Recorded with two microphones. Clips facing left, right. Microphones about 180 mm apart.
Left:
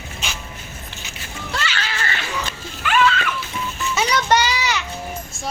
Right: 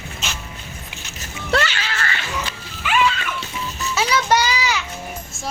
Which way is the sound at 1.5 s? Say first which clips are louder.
Right 8 dB; 65° right (ahead or behind).